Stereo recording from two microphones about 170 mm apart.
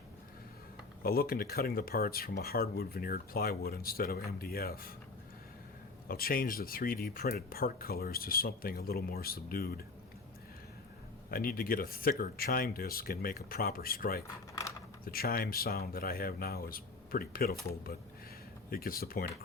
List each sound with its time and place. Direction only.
1.0 s speech: 60° left (ahead or behind)
6.1 s speech: 60° left (ahead or behind)
11.3 s speech: 60° left (ahead or behind)
18.7 s speech: 60° left (ahead or behind)